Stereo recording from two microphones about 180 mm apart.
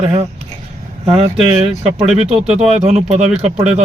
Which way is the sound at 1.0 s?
35° right (ahead or behind).